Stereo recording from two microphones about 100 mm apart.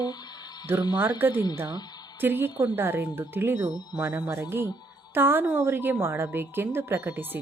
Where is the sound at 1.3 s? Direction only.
45° left (ahead or behind).